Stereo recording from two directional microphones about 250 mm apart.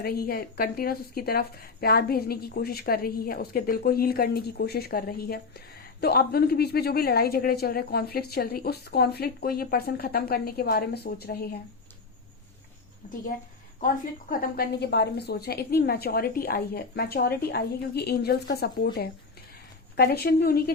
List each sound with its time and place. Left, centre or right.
0.0 s speech: left
13.7 s speech: left
20.0 s speech: left